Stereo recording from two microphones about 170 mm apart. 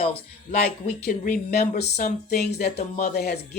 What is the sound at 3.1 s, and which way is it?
Speech, 65° left (ahead or behind).